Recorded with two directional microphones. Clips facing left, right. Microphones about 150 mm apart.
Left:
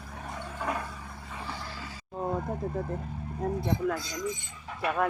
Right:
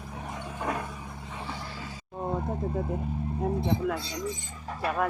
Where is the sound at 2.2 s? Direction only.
10° right (ahead or behind).